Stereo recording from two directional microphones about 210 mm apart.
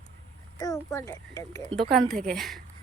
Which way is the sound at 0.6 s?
15° left (ahead or behind).